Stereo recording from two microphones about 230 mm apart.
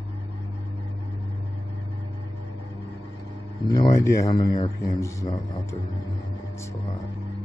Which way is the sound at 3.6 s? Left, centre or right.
Centre.